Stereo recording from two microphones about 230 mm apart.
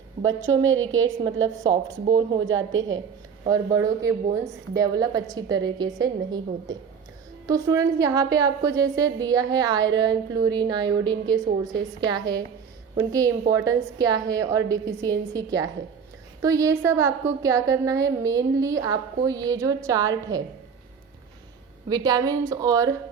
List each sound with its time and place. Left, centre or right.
0.3 s a woman's voice: right
2.0 s speech: centre
3.5 s a woman's voice: centre
21.8 s a woman's voice: centre